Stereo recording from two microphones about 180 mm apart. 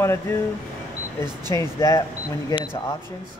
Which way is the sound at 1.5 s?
20° left (ahead or behind).